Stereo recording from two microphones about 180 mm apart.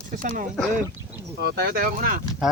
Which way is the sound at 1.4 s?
60° right (ahead or behind).